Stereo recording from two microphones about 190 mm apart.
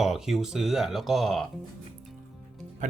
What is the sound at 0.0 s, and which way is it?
Speech, centre (ahead or behind).